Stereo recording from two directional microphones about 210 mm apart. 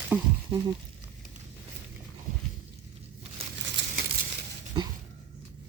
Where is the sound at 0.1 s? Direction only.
5° right (ahead or behind).